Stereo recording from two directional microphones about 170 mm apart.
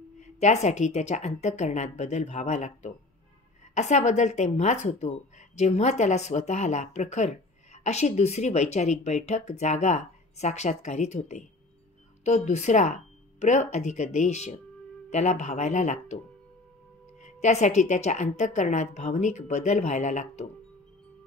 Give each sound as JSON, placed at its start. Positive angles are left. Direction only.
{"t": 0.2, "sound": "a woman's voice", "side_deg": 40}
{"t": 17.2, "sound": "a woman's voice", "side_deg": 40}